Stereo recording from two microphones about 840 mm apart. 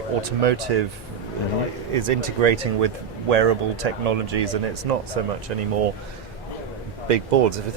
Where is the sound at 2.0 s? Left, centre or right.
Right.